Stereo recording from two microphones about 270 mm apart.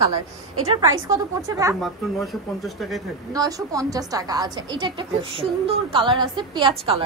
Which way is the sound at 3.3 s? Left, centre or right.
Centre.